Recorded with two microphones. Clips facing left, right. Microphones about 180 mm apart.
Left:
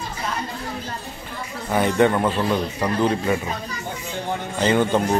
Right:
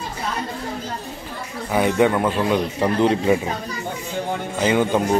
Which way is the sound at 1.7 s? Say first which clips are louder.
Right 1 dB; 5° right (ahead or behind).